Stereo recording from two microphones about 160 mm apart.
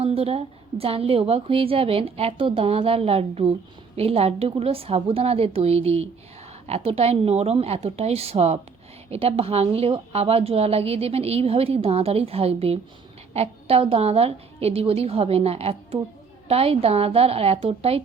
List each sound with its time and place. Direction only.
0.0 s a woman's voice: 40° right (ahead or behind)